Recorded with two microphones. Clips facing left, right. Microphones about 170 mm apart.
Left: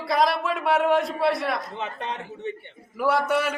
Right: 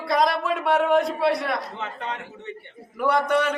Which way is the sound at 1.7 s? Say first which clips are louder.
Left 1 dB; 20° left (ahead or behind).